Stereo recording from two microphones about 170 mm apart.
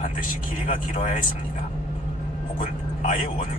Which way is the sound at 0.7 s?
50° left (ahead or behind).